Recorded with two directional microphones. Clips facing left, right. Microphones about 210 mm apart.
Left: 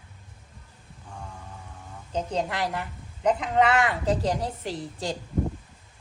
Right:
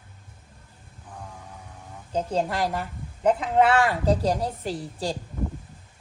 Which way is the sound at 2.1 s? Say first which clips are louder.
Right 3 dB; 10° right (ahead or behind).